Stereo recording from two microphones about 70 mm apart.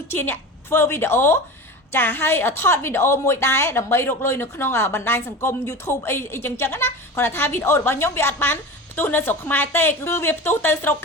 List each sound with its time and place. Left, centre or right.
0.1 s a woman's voice: left